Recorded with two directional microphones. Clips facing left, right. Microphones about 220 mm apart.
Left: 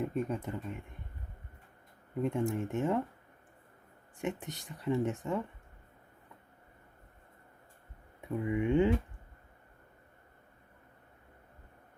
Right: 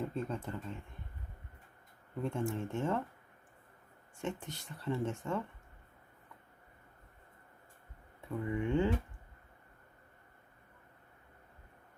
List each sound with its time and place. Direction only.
0.0 s speech: 15° left (ahead or behind)
2.2 s speech: 15° left (ahead or behind)
4.2 s speech: 15° left (ahead or behind)
8.2 s speech: 15° left (ahead or behind)